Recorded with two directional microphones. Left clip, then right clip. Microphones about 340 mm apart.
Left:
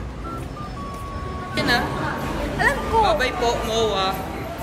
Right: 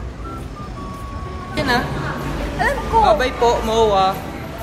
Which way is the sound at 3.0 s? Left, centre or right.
Centre.